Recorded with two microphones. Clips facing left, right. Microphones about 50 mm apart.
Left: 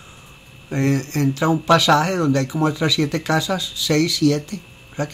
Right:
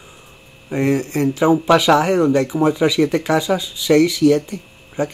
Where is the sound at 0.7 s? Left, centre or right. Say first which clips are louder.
Right 2 dB; centre.